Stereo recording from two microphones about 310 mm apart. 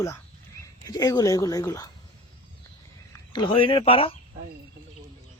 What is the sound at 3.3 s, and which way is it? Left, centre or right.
Speech, centre.